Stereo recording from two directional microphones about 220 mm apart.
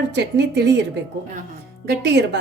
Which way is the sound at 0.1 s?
50° right (ahead or behind).